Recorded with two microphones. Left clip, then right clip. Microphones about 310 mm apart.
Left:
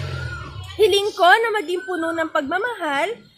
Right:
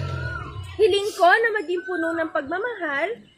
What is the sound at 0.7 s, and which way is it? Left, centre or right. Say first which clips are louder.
A woman's voice: left 3 dB; left.